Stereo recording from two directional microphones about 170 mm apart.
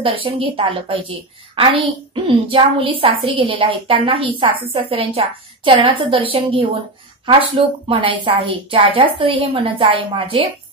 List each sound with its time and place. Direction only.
0.0 s a woman's voice: 30° right (ahead or behind)